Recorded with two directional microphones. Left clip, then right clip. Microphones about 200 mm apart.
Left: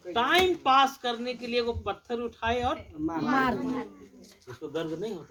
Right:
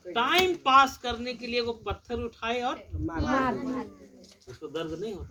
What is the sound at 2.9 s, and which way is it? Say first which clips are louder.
Speech: left 3 dB; 50° left (ahead or behind).